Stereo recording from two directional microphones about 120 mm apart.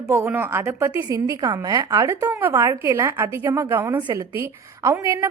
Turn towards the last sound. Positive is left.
turn(degrees=-25)  # may be behind; listen again after turning